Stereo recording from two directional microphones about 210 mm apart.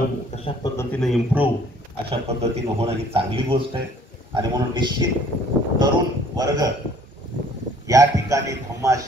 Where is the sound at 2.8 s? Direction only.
25° right (ahead or behind).